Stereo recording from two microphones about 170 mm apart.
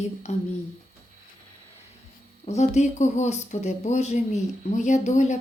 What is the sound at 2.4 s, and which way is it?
Speech, 40° left (ahead or behind).